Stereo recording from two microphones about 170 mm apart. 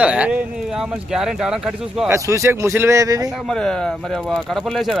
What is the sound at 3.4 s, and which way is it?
Speech, 5° left (ahead or behind).